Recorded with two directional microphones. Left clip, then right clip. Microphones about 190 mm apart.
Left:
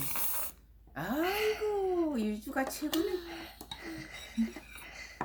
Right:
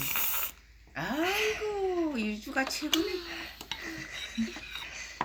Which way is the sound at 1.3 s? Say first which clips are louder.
Right 1 dB; 10° right (ahead or behind).